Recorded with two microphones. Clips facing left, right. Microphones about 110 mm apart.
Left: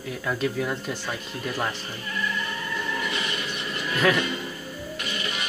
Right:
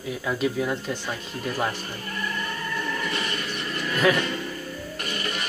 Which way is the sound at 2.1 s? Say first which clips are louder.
Left 2 dB; 45° right (ahead or behind).